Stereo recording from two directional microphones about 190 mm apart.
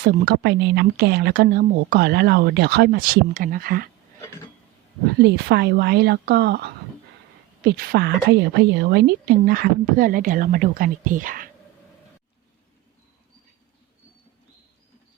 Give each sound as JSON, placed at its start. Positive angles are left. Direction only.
{"t": 0.0, "sound": "speech", "side_deg": -50}
{"t": 5.2, "sound": "a woman's voice", "side_deg": -60}